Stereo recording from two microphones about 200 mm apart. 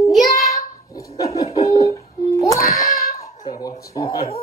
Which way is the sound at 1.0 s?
15° left (ahead or behind).